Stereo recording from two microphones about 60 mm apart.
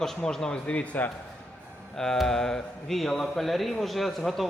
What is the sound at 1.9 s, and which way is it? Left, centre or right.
A man's voice, centre.